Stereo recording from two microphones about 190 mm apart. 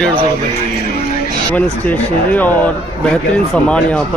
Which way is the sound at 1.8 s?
10° left (ahead or behind).